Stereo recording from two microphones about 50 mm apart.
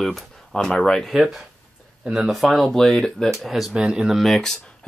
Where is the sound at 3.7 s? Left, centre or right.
Centre.